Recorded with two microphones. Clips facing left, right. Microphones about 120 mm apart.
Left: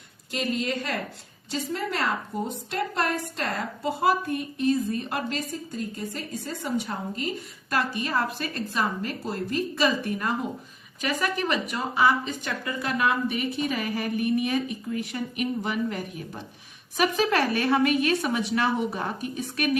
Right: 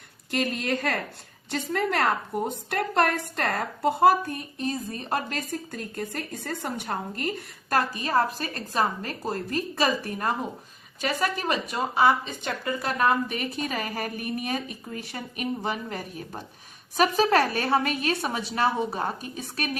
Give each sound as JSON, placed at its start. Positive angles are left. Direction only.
{"t": 0.3, "sound": "a woman's voice", "side_deg": -55}
{"t": 5.3, "sound": "a woman's voice", "side_deg": -55}